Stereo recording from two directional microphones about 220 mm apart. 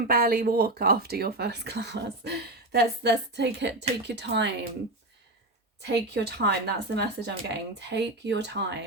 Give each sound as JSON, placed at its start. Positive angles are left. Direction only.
{"t": 0.1, "sound": "speech", "side_deg": -40}
{"t": 5.8, "sound": "speech", "side_deg": -50}